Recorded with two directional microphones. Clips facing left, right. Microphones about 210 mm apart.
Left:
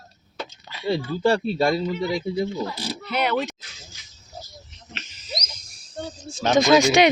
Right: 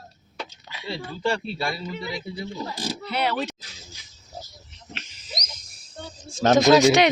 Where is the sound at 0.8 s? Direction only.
40° left (ahead or behind).